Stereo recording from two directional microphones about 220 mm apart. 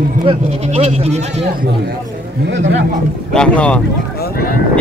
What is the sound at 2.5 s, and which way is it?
Speech, 55° right (ahead or behind).